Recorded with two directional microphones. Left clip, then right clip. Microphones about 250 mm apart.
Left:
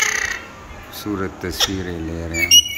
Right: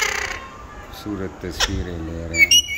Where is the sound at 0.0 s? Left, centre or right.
Right.